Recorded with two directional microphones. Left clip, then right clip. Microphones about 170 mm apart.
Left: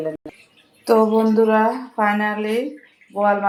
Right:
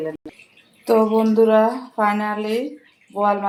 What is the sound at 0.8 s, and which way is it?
Speech, centre (ahead or behind).